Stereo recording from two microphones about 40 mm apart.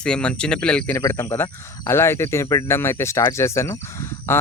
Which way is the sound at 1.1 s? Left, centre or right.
Left.